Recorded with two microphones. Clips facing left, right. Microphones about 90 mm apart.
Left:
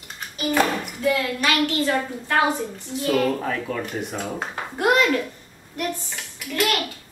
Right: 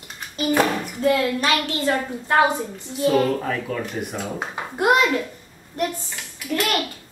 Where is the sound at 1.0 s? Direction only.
35° right (ahead or behind).